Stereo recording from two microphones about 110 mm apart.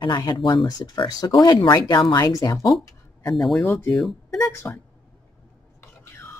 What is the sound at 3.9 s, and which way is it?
Speech, centre (ahead or behind).